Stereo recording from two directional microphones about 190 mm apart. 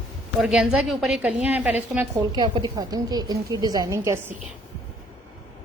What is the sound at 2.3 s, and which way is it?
A woman's voice, 20° right (ahead or behind).